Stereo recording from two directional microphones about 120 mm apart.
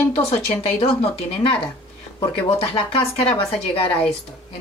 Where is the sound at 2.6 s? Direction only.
50° left (ahead or behind).